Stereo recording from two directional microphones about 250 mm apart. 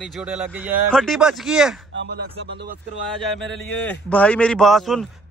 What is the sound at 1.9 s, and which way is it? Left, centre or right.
Speech, right.